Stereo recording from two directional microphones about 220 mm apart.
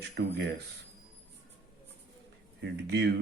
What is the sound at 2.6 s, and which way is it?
Speech, 50° right (ahead or behind).